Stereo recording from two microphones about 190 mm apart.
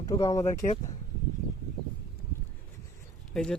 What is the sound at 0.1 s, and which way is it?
Speech, 20° left (ahead or behind).